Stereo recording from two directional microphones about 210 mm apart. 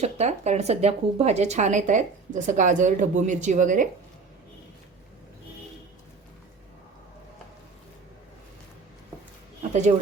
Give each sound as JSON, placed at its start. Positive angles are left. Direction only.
{"t": 0.0, "sound": "speech", "side_deg": -30}